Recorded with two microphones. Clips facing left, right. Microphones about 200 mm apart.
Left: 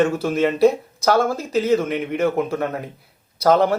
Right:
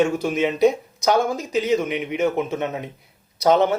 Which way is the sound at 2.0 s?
Centre (ahead or behind).